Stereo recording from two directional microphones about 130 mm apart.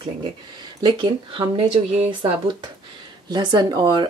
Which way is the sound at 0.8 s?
40° right (ahead or behind).